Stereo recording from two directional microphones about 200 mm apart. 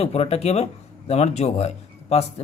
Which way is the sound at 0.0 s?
30° left (ahead or behind).